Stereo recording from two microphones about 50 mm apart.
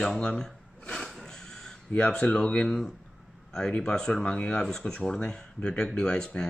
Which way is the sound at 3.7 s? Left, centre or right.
Centre.